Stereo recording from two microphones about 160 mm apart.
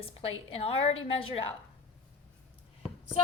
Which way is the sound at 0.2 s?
35° left (ahead or behind).